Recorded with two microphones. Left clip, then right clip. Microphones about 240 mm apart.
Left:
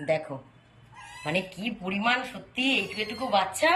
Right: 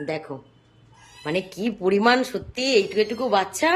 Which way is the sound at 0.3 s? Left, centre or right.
Centre.